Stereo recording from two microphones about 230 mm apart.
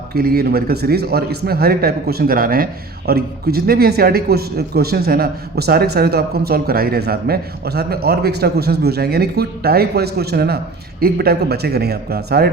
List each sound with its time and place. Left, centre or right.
0.1 s a man's voice: right